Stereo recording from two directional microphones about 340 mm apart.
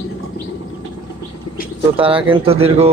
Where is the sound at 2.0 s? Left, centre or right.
Centre.